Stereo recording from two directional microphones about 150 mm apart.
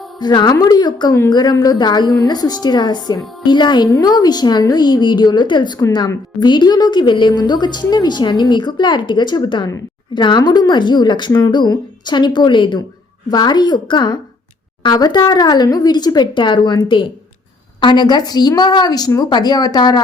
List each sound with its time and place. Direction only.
0.2 s a woman's voice: 30° left (ahead or behind)